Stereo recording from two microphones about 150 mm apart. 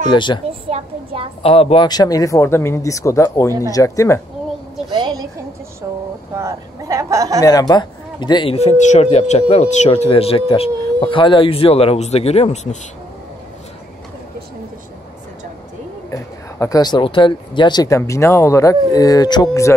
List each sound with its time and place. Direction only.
0.1 s speech: 30° left (ahead or behind)
0.7 s a sound: 40° right (ahead or behind)
1.4 s speech: 40° left (ahead or behind)
1.9 s speech: 25° left (ahead or behind)
4.9 s a sound: 25° right (ahead or behind)
7.4 s speech: 25° left (ahead or behind)
8.5 s speech: 50° left (ahead or behind)
16.1 s speech: 20° left (ahead or behind)